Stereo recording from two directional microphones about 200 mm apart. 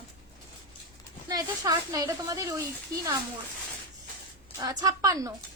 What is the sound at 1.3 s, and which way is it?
Speech, 20° right (ahead or behind).